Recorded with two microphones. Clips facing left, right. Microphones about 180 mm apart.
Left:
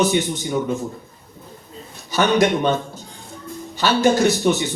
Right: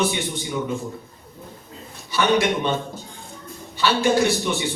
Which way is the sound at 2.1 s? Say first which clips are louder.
Left 3 dB; 45° left (ahead or behind).